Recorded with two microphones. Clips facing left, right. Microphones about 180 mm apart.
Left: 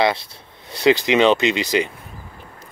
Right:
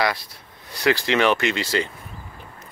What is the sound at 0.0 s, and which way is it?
Speech, 25° left (ahead or behind).